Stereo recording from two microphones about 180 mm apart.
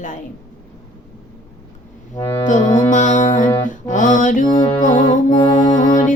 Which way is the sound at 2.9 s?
45° left (ahead or behind).